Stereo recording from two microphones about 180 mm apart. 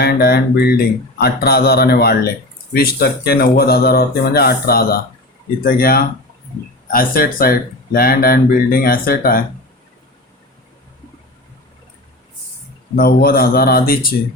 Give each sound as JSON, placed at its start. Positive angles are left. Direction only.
{"t": 0.0, "sound": "speech", "side_deg": 60}
{"t": 13.0, "sound": "speech", "side_deg": 55}